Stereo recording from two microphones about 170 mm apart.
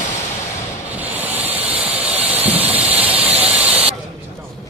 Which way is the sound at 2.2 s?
10° right (ahead or behind).